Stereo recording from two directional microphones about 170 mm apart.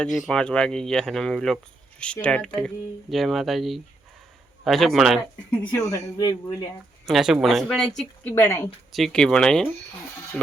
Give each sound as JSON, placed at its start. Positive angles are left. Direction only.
{"t": 0.0, "sound": "speech", "side_deg": 0}
{"t": 5.7, "sound": "speech", "side_deg": 20}
{"t": 7.0, "sound": "speech", "side_deg": 0}
{"t": 8.9, "sound": "speech", "side_deg": 0}